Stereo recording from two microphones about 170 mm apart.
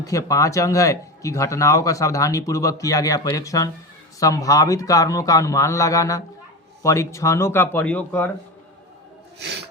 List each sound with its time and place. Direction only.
0.0 s speech: 20° left (ahead or behind)
9.4 s snort: 80° right